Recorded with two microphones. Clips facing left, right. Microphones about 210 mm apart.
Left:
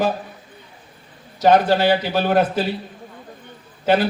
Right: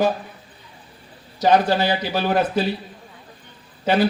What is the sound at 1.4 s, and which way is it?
A man's voice, 55° left (ahead or behind).